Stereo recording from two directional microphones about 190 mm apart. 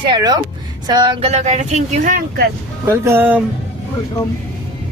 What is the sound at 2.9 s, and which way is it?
Speech, 10° right (ahead or behind).